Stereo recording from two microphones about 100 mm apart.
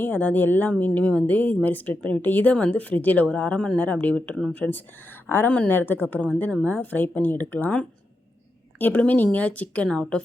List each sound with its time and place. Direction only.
0.0 s a woman's voice: 15° left (ahead or behind)